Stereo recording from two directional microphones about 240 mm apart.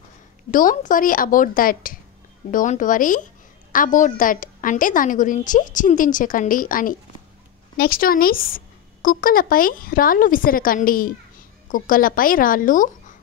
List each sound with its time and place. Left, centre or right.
0.5 s a woman's voice: left